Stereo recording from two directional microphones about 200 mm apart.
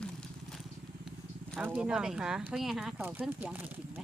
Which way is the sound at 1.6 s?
5° right (ahead or behind).